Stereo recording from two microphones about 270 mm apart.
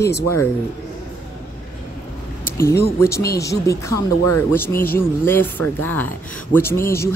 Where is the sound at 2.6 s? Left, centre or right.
Centre.